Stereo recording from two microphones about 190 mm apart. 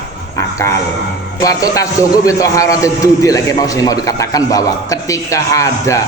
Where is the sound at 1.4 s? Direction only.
20° left (ahead or behind).